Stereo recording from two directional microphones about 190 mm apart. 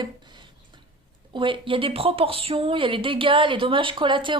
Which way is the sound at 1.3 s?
25° right (ahead or behind).